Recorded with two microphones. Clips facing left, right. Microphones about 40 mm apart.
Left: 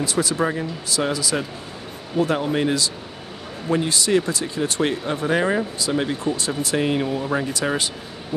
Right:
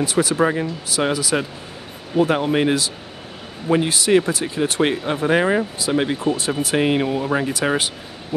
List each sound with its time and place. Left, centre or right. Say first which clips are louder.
0.0 s speech: right 4 dB; right